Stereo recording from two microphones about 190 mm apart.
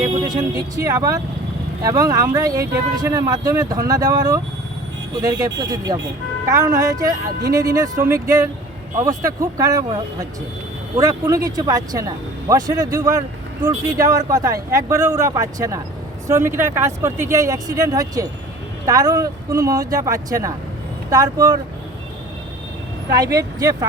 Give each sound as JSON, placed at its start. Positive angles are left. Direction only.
{"t": 0.0, "sound": "speech", "side_deg": -20}
{"t": 23.1, "sound": "speech", "side_deg": -20}